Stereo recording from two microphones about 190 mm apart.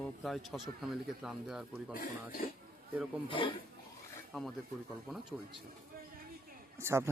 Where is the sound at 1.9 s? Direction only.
50° left (ahead or behind).